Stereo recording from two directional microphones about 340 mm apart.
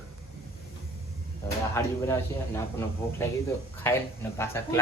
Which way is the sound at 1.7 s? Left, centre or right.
Centre.